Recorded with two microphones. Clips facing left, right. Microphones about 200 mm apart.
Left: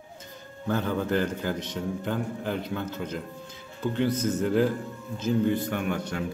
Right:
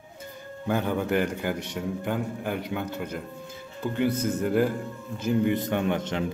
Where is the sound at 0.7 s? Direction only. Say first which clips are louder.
Right 1 dB; 15° right (ahead or behind).